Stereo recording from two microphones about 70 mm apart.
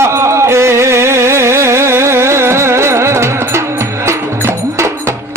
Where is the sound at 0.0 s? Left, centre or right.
Right.